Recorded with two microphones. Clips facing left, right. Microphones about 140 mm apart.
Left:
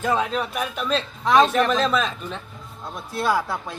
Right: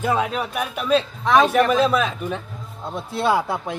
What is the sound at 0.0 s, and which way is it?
A man's voice, 10° right (ahead or behind).